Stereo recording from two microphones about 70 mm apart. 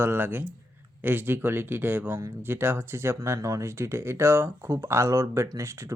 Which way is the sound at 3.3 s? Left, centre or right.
Right.